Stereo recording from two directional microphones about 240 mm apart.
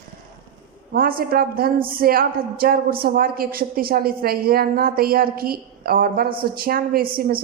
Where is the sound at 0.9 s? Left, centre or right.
Right.